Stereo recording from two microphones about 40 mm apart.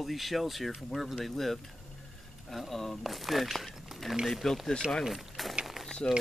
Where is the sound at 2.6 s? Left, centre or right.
Centre.